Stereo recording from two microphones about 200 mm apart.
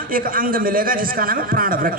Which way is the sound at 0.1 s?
45° right (ahead or behind).